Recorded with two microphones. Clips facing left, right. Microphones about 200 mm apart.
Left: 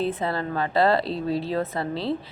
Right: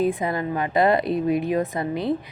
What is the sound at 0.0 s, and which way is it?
A woman's voice, 15° right (ahead or behind).